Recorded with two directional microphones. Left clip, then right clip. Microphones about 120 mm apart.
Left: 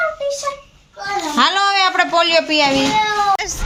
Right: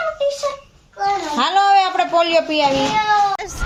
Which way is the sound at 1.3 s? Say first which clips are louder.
Even; centre (ahead or behind).